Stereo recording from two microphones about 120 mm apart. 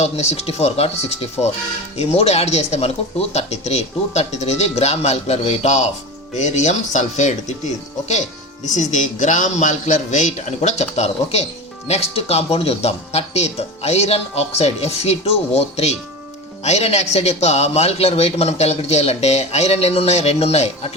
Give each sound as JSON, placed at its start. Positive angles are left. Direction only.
{"t": 0.0, "sound": "a man's voice", "side_deg": 65}
{"t": 8.7, "sound": "a man's voice", "side_deg": 90}